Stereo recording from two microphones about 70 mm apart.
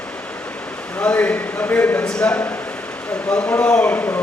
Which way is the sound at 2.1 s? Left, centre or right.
Centre.